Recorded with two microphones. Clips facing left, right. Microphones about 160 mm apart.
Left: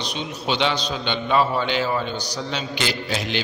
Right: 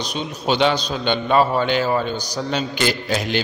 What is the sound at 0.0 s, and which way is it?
A man's voice, 45° right (ahead or behind).